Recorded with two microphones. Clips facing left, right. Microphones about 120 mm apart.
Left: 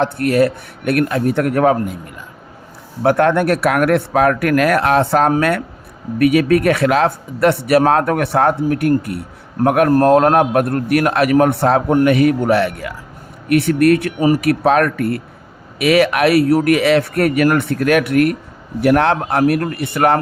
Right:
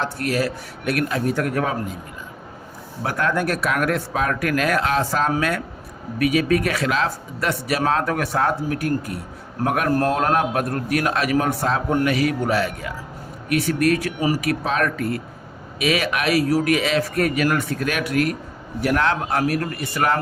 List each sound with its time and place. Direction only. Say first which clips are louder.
0.0 s a man's voice: left 8 dB; 55° left (ahead or behind)
3.0 s a man's voice: left 9 dB; 60° left (ahead or behind)